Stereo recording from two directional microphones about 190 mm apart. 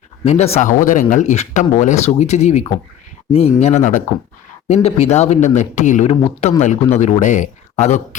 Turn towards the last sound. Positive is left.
turn(degrees=35)  # may be behind; listen again after turning